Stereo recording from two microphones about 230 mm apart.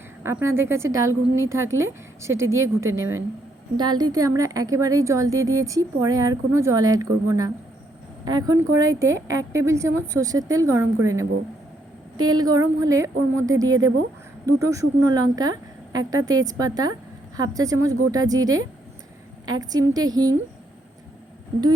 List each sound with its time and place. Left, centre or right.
0.2 s a woman's voice: centre
12.1 s speech: right
12.4 s a woman's voice: centre